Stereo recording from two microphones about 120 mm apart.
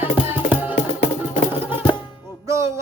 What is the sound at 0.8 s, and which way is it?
Music, 90° left.